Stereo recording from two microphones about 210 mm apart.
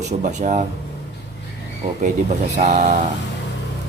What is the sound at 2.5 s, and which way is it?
Speech, 35° right (ahead or behind).